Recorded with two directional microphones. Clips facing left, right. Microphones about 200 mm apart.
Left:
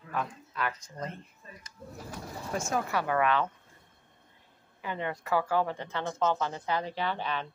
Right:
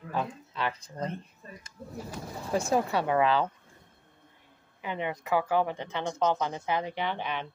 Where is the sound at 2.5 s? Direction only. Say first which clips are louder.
Right 4 dB; 30° right (ahead or behind).